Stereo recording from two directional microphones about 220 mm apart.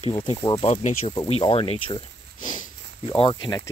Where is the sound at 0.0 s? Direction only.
30° left (ahead or behind).